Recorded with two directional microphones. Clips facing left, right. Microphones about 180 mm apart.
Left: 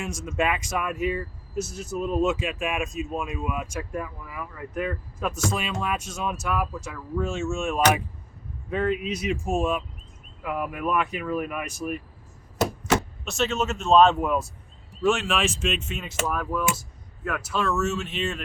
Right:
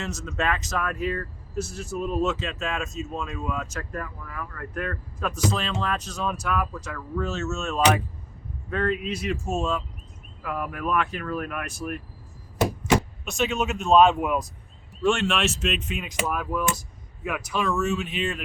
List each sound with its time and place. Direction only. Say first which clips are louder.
0.0 s speech: left 2 dB; 10° left (ahead or behind)
9.4 s speech: left 2 dB; 15° left (ahead or behind)
12.5 s a sound: right 1 dB; centre (ahead or behind)
13.3 s speech: even; centre (ahead or behind)
13.9 s speech: even; 10° right (ahead or behind)
15.0 s speech: even; 5° left (ahead or behind)
17.7 s speech: right 1 dB; 10° right (ahead or behind)